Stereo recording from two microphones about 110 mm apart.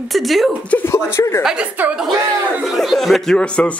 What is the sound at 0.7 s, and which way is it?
Speech, 15° left (ahead or behind).